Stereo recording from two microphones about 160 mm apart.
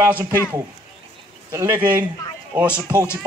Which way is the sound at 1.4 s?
15° right (ahead or behind).